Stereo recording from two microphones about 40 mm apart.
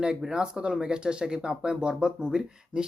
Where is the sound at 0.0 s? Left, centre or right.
Centre.